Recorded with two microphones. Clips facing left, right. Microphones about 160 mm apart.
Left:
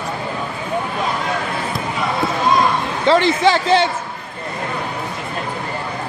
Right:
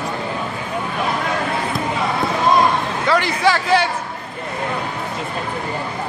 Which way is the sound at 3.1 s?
25° left (ahead or behind).